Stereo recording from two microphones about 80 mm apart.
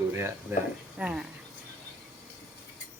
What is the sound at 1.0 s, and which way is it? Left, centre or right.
Speech, centre.